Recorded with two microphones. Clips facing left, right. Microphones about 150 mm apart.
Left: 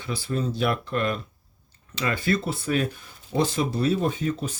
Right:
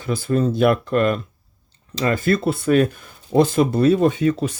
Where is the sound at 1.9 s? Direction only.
40° right (ahead or behind).